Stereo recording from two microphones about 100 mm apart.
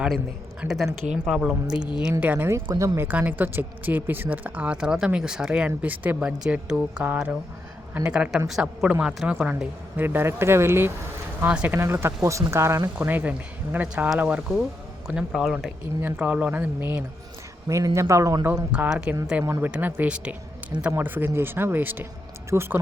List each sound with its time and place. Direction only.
0.6 s a man's voice: 5° right (ahead or behind)
2.2 s speech: 20° right (ahead or behind)
3.1 s speech: 15° right (ahead or behind)
11.3 s speech: 15° right (ahead or behind)
11.8 s speech: 25° right (ahead or behind)
13.1 s a man's voice: 15° right (ahead or behind)
16.0 s speech: 20° right (ahead or behind)
17.7 s speech: 30° right (ahead or behind)
18.7 s speech: 10° right (ahead or behind)
19.5 s speech: 25° right (ahead or behind)
19.7 s speech: 15° right (ahead or behind)